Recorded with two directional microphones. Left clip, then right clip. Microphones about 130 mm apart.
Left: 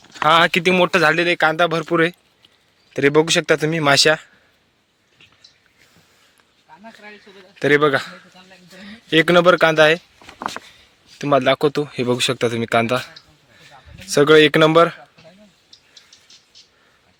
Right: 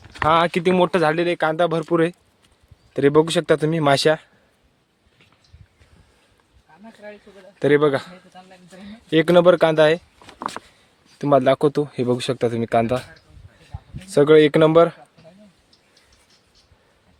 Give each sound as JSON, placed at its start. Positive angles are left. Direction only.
{"t": 0.0, "sound": "a sound", "side_deg": 30}
{"t": 0.3, "sound": "speech", "side_deg": -10}
{"t": 3.8, "sound": "speech", "side_deg": -20}
{"t": 7.6, "sound": "speech", "side_deg": -15}
{"t": 10.2, "sound": "a sound", "side_deg": 40}
{"t": 11.2, "sound": "speech", "side_deg": -25}
{"t": 12.0, "sound": "speech", "side_deg": 0}
{"t": 14.1, "sound": "speech", "side_deg": -5}